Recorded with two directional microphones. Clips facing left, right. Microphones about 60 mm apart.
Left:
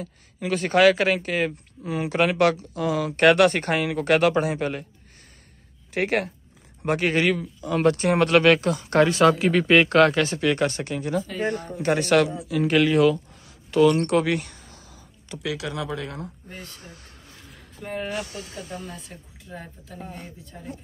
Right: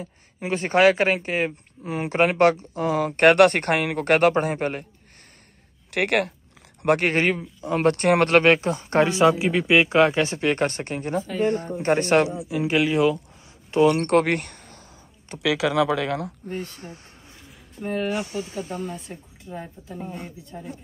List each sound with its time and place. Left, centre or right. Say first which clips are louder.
0.0 s speech: left 1 dB; right
5.9 s speech: right 2 dB; right
7.2 s speech: even; right
7.9 s speech: right 3 dB; right; by 10.2 s centre
10.2 s speech: even; right
13.7 s speech: even; right
14.0 s speech: right 2 dB; right
15.3 s speech: even; right
15.9 s speech: right 8 dB; right
16.6 s speech: right 4 dB; right
18.1 s speech: right 4 dB; right